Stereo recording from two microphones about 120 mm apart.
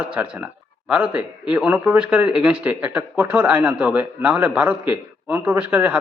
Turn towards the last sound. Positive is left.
turn(degrees=-15)  # may be behind; listen again after turning